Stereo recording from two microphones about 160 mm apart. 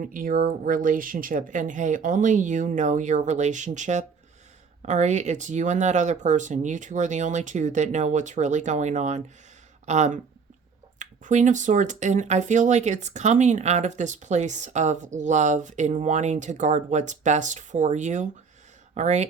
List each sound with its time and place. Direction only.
0.0 s speech: 60° right (ahead or behind)